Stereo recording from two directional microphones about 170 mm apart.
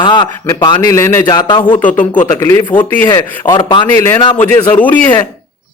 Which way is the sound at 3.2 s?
25° left (ahead or behind).